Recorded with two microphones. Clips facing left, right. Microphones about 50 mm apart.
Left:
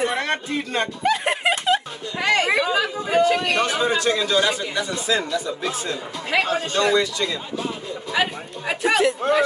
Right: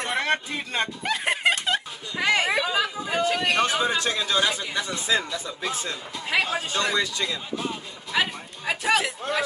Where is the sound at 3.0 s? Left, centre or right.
Centre.